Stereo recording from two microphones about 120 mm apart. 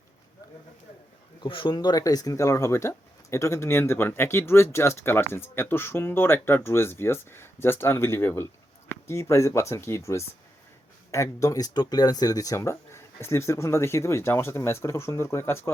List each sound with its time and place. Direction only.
1.4 s speech: 45° left (ahead or behind); by 15.7 s 20° left (ahead or behind)